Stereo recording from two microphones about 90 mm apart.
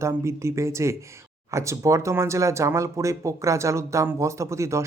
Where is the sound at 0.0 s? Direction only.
30° right (ahead or behind).